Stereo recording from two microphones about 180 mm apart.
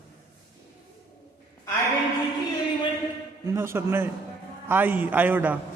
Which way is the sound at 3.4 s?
15° right (ahead or behind).